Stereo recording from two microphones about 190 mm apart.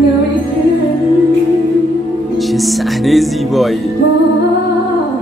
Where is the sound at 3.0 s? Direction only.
Centre (ahead or behind).